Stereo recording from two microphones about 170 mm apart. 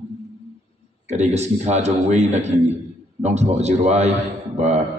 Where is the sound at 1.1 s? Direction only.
40° right (ahead or behind).